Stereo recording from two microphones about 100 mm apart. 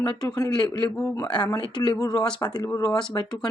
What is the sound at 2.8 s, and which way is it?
Speech, 5° left (ahead or behind).